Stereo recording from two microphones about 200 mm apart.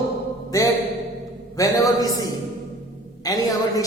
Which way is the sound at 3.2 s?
15° left (ahead or behind).